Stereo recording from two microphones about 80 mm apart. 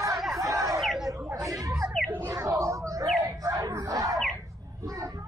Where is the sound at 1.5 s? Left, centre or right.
Right.